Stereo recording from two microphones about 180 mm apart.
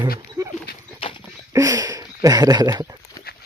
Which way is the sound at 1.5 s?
20° right (ahead or behind).